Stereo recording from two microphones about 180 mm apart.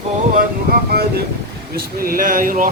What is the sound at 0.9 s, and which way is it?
Speech, 60° right (ahead or behind).